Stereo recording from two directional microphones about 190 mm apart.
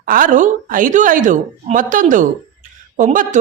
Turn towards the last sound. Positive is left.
turn(degrees=-45)  # may be behind; listen again after turning